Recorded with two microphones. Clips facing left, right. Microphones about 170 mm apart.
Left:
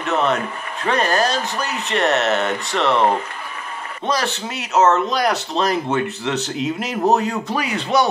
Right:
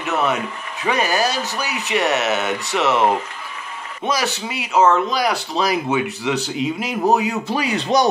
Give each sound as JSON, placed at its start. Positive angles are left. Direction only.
{"t": 0.0, "sound": "speech", "side_deg": -5}
{"t": 7.5, "sound": "speech", "side_deg": -35}